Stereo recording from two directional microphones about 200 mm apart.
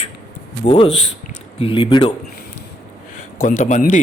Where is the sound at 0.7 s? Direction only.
30° left (ahead or behind).